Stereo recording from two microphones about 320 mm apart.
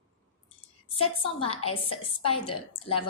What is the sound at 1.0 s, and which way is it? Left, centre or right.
A woman's voice, centre.